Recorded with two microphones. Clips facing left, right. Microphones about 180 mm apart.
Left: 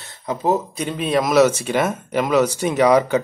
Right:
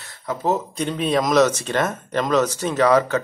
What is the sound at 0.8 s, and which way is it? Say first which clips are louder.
Speech: right 1 dB; centre (ahead or behind).